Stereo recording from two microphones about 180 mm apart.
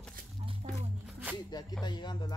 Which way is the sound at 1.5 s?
25° left (ahead or behind).